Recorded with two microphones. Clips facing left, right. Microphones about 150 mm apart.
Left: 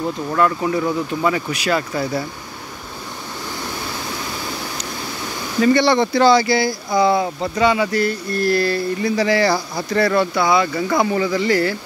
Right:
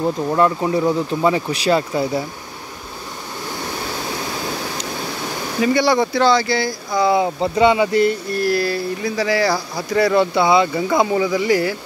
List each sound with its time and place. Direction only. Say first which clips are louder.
0.0 s speech: right 2 dB; 25° right (ahead or behind)
5.6 s speech: left 2 dB; 10° right (ahead or behind)
6.2 s speech: left 4 dB; 5° left (ahead or behind)
7.3 s speech: right 3 dB; 20° right (ahead or behind)
8.4 s speech: left 4 dB; 5° right (ahead or behind)
10.3 s speech: right 2 dB; 25° right (ahead or behind)